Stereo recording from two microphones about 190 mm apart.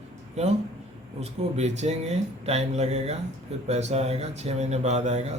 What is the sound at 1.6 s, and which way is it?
Speech, 35° right (ahead or behind).